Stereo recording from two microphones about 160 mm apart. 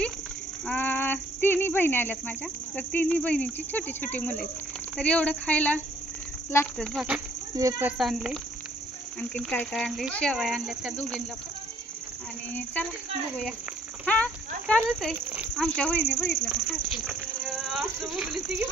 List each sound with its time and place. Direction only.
0.7 s speech: 10° left (ahead or behind)
6.8 s speech: 5° left (ahead or behind)
7.5 s speech: 20° right (ahead or behind)
8.0 s speech: centre (ahead or behind)
14.0 s speech: 10° left (ahead or behind)
16.4 s speech: 5° right (ahead or behind)